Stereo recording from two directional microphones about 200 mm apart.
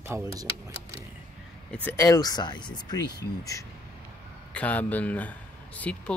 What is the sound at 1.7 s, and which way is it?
Speech, 10° left (ahead or behind).